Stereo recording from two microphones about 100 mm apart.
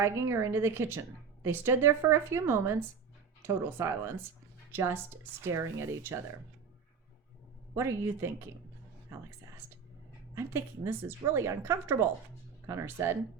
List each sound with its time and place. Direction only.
0.0 s a woman's voice: 30° right (ahead or behind)
7.8 s a woman's voice: 25° right (ahead or behind)
10.3 s a woman's voice: 25° right (ahead or behind)